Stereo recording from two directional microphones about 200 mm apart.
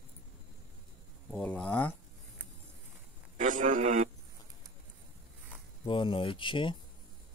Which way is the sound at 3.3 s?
40° right (ahead or behind).